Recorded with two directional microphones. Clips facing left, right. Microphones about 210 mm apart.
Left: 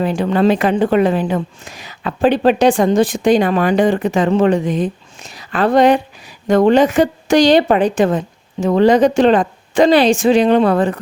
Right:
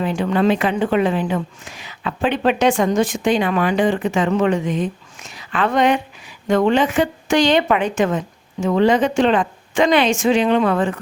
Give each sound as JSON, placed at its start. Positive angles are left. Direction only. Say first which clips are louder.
{"t": 0.0, "sound": "a woman's voice", "louder": "left 3 dB", "side_deg": 35}